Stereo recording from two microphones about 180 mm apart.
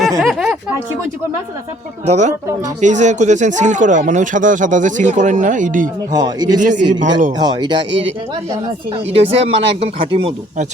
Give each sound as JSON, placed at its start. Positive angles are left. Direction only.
{"t": 0.2, "sound": "speech", "side_deg": 0}
{"t": 2.0, "sound": "speech", "side_deg": -40}
{"t": 6.1, "sound": "a man's voice", "side_deg": -20}
{"t": 6.6, "sound": "speech", "side_deg": -45}
{"t": 7.3, "sound": "a man's voice", "side_deg": -25}
{"t": 7.9, "sound": "speech", "side_deg": -90}
{"t": 9.1, "sound": "speech", "side_deg": -35}